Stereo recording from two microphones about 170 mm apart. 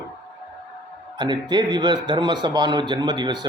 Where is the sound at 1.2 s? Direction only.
25° right (ahead or behind).